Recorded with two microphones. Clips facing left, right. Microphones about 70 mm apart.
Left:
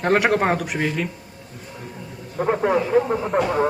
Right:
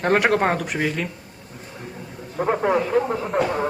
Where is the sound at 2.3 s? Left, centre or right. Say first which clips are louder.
Left 1 dB; centre.